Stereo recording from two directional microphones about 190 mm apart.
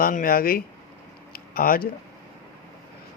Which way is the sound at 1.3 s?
50° left (ahead or behind).